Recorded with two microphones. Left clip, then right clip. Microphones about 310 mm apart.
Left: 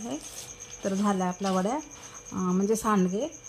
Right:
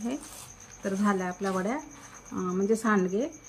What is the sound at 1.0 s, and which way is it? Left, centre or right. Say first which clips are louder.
Speech: even; left.